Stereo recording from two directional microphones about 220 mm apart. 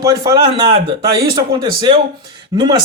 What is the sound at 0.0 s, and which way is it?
Speech, 15° right (ahead or behind).